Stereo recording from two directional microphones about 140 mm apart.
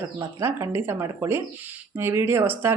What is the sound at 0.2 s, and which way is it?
Speech, 20° right (ahead or behind).